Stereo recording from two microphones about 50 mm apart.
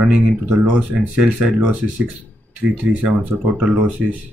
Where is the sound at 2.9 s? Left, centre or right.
Right.